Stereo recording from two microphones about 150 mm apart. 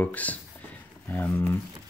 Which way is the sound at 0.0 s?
10° left (ahead or behind).